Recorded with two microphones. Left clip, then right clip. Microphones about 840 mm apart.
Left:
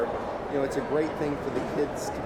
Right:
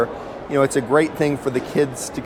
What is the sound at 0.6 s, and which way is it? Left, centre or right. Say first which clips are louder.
Speech: right 11 dB; right.